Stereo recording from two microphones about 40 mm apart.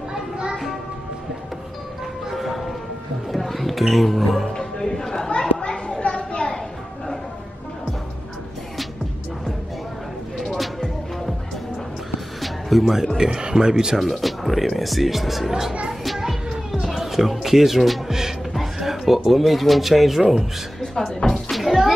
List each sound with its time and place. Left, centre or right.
0.1 s a sound: right
2.3 s music: centre
4.6 s music: centre
5.6 s children playing: left
10.3 s music: centre
12.4 s music: centre
13.2 s speech: centre
13.9 s speech: centre
15.9 s music: centre
16.2 s music: centre
16.8 s speech: centre
20.8 s music: centre
21.5 s music: centre